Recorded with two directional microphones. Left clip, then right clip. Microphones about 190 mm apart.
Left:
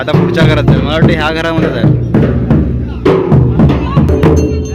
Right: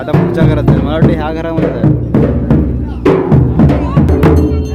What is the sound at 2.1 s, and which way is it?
Music, 30° left (ahead or behind).